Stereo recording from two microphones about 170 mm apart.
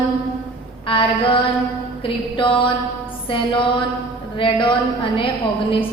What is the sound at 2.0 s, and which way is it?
A woman's voice, 30° left (ahead or behind).